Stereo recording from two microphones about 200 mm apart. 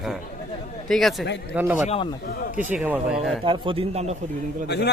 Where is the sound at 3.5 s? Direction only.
25° right (ahead or behind).